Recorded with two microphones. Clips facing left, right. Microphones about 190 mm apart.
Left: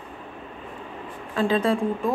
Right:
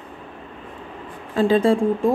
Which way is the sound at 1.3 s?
30° right (ahead or behind).